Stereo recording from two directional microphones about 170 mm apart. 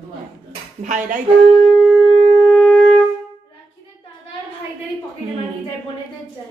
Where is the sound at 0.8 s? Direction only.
50° right (ahead or behind).